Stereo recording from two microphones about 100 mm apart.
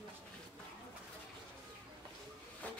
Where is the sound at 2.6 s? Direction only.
15° left (ahead or behind).